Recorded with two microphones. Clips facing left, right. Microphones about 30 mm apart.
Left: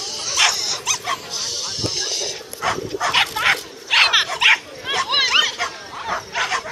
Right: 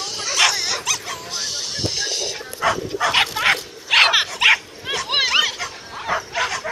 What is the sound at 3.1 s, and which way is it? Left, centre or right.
Dog, centre.